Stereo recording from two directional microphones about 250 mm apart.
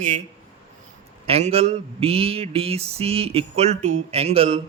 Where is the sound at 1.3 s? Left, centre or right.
Right.